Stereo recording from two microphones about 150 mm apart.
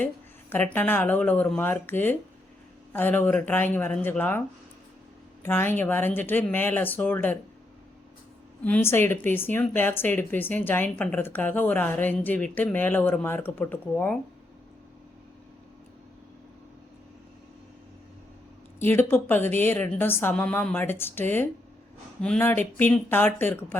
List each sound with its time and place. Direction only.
0.5 s speech: 10° left (ahead or behind)
8.6 s speech: 15° left (ahead or behind)
18.8 s speech: 15° left (ahead or behind)